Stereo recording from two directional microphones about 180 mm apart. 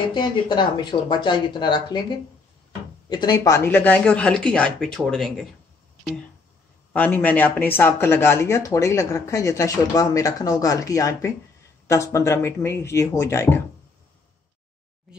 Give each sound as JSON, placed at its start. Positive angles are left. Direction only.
{"t": 0.1, "sound": "speech", "side_deg": 25}
{"t": 3.1, "sound": "speech", "side_deg": 25}
{"t": 6.9, "sound": "speech", "side_deg": 10}